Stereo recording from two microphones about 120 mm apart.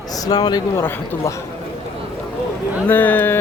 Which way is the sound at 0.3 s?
35° left (ahead or behind).